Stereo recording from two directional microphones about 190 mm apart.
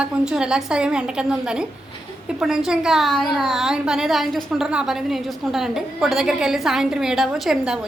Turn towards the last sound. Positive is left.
turn(degrees=0)  # may be behind; listen again after turning